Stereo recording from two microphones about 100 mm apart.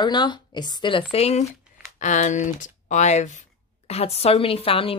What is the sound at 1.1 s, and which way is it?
Speech, 90° left.